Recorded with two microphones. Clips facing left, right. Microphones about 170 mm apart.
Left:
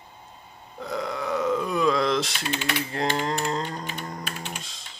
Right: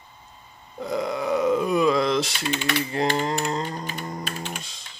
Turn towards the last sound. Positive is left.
turn(degrees=0)  # may be behind; listen again after turning